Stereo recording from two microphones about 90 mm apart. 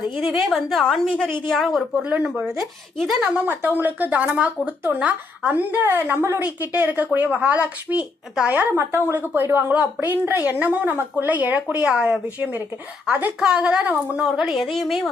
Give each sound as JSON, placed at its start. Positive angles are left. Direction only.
{"t": 0.2, "sound": "a woman's voice", "side_deg": -5}
{"t": 3.3, "sound": "a woman's voice", "side_deg": -20}
{"t": 8.8, "sound": "a woman's voice", "side_deg": -30}
{"t": 13.4, "sound": "a woman's voice", "side_deg": -10}